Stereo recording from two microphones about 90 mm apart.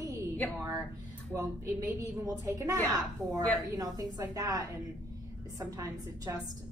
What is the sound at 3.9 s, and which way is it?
A woman's voice, 40° right (ahead or behind).